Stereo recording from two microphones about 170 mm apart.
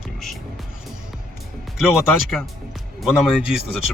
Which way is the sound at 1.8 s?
Centre (ahead or behind).